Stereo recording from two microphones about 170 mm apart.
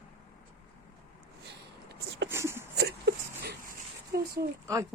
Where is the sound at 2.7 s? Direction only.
70° right (ahead or behind).